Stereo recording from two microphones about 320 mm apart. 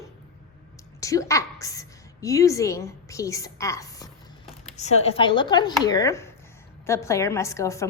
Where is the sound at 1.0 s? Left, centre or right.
Centre.